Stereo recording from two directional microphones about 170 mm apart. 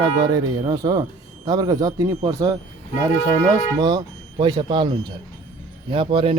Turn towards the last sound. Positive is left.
turn(degrees=-30)  # may be behind; listen again after turning